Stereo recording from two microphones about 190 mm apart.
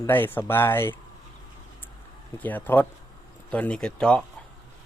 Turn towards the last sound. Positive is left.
turn(degrees=5)  # may be behind; listen again after turning